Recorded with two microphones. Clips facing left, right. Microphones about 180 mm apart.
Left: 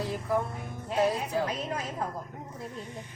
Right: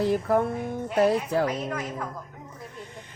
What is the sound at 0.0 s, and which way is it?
Music, 60° right (ahead or behind).